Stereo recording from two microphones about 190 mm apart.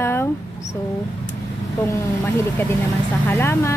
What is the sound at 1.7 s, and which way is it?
A woman's voice, 10° left (ahead or behind).